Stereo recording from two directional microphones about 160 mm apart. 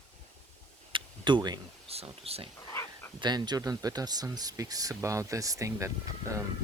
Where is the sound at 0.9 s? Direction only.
30° right (ahead or behind).